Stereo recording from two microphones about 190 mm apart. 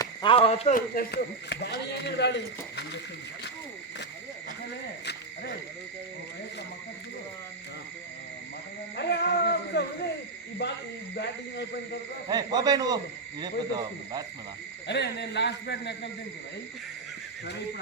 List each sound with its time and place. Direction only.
0.0 s a sound: 25° left (ahead or behind)
0.7 s a man's voice: 55° left (ahead or behind)
9.0 s a man's voice: 60° left (ahead or behind)
12.3 s speech: 20° right (ahead or behind)
14.8 s a man's voice: 60° left (ahead or behind)